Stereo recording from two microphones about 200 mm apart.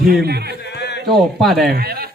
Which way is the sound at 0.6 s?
55° left (ahead or behind).